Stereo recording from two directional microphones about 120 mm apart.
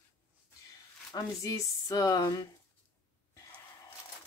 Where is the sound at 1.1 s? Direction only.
30° left (ahead or behind).